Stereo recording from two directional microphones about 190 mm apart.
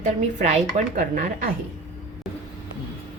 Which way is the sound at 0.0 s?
40° right (ahead or behind).